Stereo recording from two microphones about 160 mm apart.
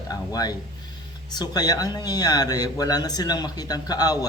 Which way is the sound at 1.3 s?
25° left (ahead or behind).